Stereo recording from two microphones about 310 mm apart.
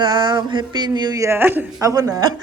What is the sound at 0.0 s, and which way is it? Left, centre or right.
Speech, centre.